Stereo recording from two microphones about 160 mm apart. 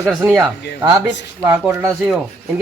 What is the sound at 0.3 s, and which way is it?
Speech, centre (ahead or behind).